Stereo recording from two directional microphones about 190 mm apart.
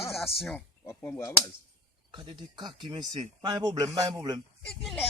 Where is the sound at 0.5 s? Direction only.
10° left (ahead or behind).